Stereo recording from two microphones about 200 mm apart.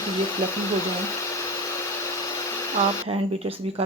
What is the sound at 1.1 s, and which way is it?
Vacuum cleaner, 15° left (ahead or behind).